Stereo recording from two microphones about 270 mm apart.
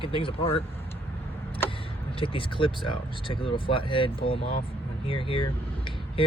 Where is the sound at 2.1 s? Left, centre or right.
Centre.